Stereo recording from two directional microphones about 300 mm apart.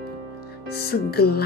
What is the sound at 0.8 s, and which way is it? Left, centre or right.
Speech, left.